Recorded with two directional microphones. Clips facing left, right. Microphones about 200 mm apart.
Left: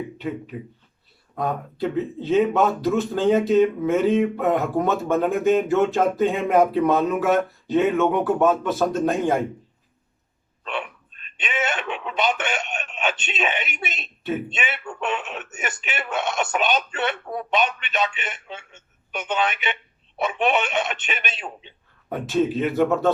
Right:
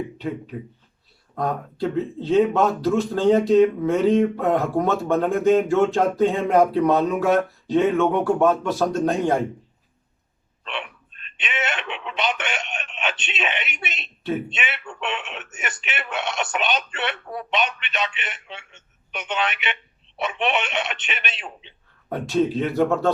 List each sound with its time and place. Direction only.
0.2 s speech: centre (ahead or behind)
11.3 s speech: 40° left (ahead or behind)
22.1 s speech: centre (ahead or behind)